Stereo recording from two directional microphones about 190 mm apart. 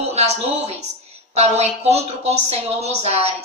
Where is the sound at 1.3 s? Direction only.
35° right (ahead or behind).